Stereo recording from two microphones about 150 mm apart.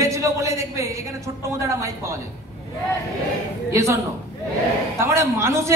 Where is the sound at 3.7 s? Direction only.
20° right (ahead or behind).